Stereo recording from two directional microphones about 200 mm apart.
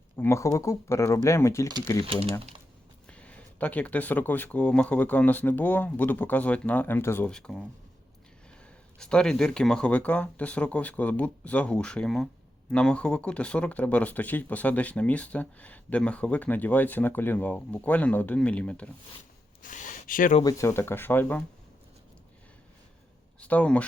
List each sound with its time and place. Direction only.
0.2 s speech: 15° left (ahead or behind)
3.1 s speech: 5° left (ahead or behind)
19.6 s speech: 40° left (ahead or behind)
20.4 s speech: 15° left (ahead or behind)
23.4 s speech: 5° left (ahead or behind)